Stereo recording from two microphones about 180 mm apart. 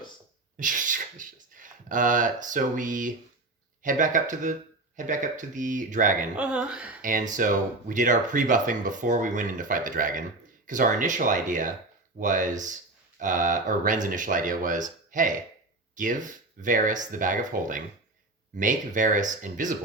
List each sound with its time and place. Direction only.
0.5 s a sound: 45° right (ahead or behind)
3.8 s speech: 45° right (ahead or behind)
6.3 s speech: 5° right (ahead or behind)
7.0 s speech: 50° right (ahead or behind)